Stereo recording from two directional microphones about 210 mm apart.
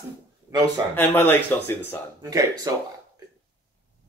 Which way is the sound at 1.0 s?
10° left (ahead or behind).